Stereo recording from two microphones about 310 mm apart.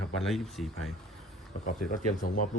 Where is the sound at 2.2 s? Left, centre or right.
Left.